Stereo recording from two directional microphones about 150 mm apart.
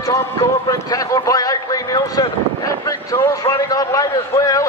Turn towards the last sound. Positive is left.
turn(degrees=25)  # may be behind; listen again after turning